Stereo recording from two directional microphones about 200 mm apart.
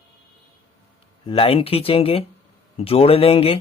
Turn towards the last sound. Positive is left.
turn(degrees=30)  # may be behind; listen again after turning